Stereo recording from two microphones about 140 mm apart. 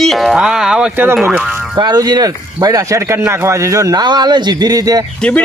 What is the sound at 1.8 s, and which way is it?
Speech, 30° right (ahead or behind).